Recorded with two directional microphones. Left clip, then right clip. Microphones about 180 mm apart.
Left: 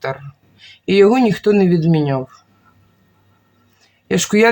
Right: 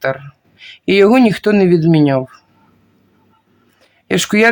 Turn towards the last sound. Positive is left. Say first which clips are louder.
# right 1 dB
turn(degrees=-35)  # may be behind; listen again after turning